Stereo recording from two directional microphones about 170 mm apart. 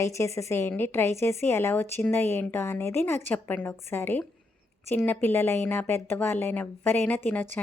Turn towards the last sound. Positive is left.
turn(degrees=10)  # may be behind; listen again after turning